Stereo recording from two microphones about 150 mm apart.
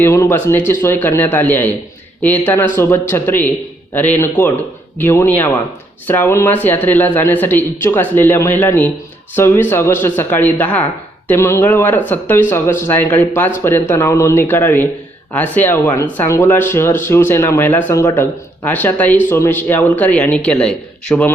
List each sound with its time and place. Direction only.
0.0 s speech: 15° left (ahead or behind)
2.7 s speech: 15° left (ahead or behind)